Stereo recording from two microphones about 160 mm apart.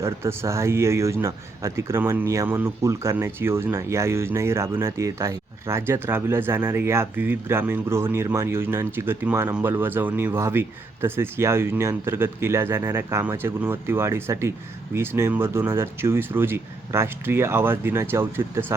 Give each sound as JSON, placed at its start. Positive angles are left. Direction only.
{"t": 0.0, "sound": "speech", "side_deg": -15}